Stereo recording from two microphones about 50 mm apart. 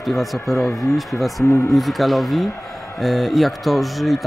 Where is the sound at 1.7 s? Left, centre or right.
Centre.